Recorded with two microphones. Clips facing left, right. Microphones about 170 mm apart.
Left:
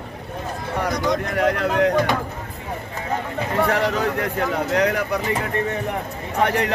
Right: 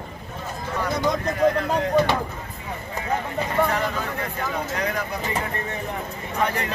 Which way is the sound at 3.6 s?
75° left (ahead or behind).